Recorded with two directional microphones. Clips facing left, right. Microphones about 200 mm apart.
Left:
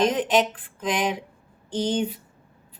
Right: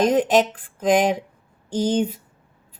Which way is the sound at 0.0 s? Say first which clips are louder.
Right 4 dB; 45° right (ahead or behind).